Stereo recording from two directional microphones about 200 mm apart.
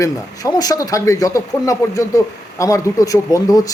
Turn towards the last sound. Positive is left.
turn(degrees=15)  # may be behind; listen again after turning